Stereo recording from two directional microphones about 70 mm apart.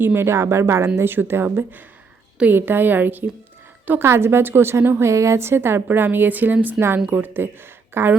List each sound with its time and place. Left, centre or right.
0.0 s a woman's voice: right
0.9 s a woman's voice: right